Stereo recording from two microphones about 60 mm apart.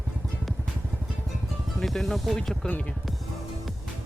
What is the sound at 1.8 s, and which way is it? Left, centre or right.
Speech, centre.